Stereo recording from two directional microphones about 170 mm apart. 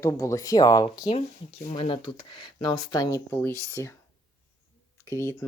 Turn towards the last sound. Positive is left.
turn(degrees=15)  # may be behind; listen again after turning